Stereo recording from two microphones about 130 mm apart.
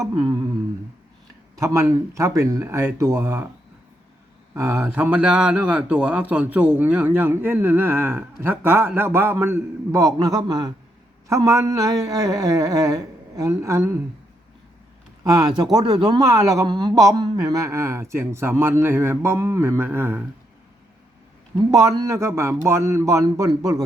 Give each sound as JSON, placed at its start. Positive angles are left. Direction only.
{"t": 1.5, "sound": "a man's voice", "side_deg": -25}
{"t": 4.5, "sound": "a man's voice", "side_deg": -20}
{"t": 15.2, "sound": "a man's voice", "side_deg": -25}
{"t": 21.7, "sound": "a man's voice", "side_deg": -25}